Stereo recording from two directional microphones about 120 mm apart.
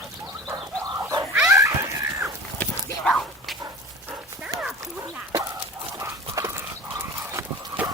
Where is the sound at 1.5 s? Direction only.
25° right (ahead or behind).